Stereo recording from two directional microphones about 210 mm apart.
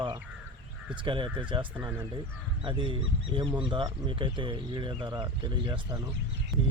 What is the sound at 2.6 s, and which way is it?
Speech, 25° right (ahead or behind).